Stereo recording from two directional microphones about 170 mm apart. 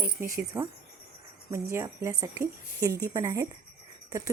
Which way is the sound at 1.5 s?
15° right (ahead or behind).